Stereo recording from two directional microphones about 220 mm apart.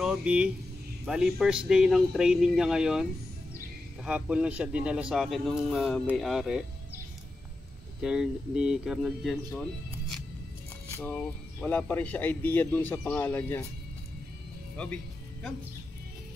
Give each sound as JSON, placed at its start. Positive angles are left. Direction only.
{"t": 0.0, "sound": "a man's voice", "side_deg": -5}
{"t": 8.0, "sound": "a man's voice", "side_deg": -5}
{"t": 11.0, "sound": "a man's voice", "side_deg": 10}